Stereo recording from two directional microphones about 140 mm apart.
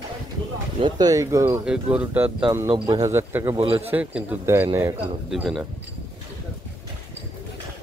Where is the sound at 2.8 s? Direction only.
25° right (ahead or behind).